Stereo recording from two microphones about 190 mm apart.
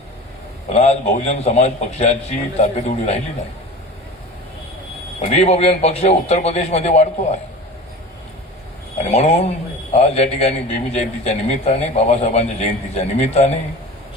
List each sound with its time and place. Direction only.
0.7 s a man's voice: 35° left (ahead or behind)
5.2 s a man's voice: 35° left (ahead or behind)
9.0 s a man's voice: 35° left (ahead or behind)